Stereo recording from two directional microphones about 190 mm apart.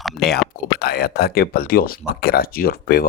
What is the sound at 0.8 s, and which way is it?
Speech, 55° left (ahead or behind).